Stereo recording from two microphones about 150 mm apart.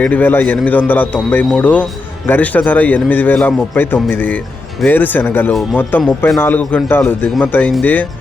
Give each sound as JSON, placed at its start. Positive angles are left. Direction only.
{"t": 0.0, "sound": "a man's voice", "side_deg": 10}